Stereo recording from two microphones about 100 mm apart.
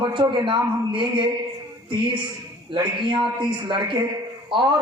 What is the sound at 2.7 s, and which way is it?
A man's voice, 55° right (ahead or behind).